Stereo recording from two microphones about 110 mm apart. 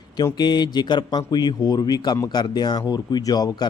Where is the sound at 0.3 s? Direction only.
40° left (ahead or behind).